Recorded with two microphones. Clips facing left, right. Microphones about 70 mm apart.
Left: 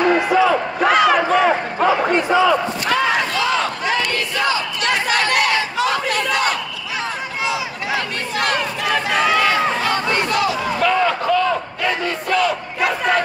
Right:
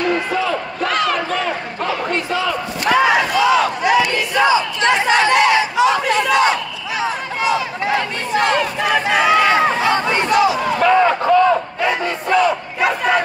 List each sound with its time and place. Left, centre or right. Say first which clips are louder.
0.1 s crowd: left 4 dB; centre
2.9 s battle cry: right 5 dB; centre
5.8 s a sound: right 4 dB; centre
8.3 s crowd: right 5 dB; right
8.8 s run: right 2 dB; centre
9.7 s chatter: right 3 dB; right
10.1 s battle cry: right 4 dB; right
10.8 s battle cry: right 4 dB; right
12.8 s crowd: right 2 dB; centre